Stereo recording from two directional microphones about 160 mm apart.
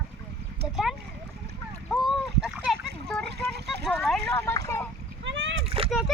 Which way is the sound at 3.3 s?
90° right.